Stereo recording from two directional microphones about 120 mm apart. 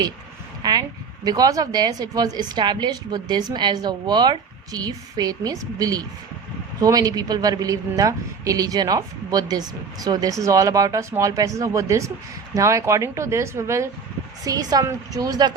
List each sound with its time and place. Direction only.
0.6 s a woman's voice: 35° right (ahead or behind)